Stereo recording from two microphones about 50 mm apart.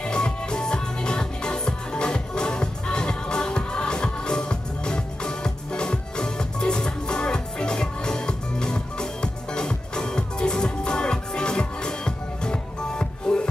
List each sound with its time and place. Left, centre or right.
0.0 s music: centre